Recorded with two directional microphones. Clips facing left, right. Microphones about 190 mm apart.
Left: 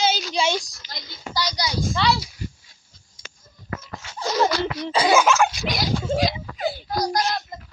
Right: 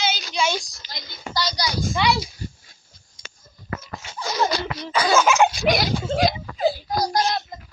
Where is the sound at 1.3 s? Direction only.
15° left (ahead or behind).